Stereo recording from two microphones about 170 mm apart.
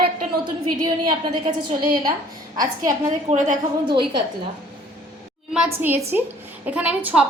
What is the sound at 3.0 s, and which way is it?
Speech, 45° right (ahead or behind).